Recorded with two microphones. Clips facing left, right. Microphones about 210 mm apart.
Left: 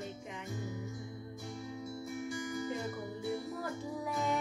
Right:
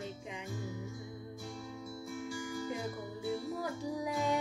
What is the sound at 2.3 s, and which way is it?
Music, 20° left (ahead or behind).